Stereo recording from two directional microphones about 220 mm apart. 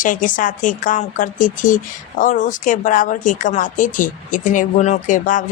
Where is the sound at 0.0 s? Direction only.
35° left (ahead or behind).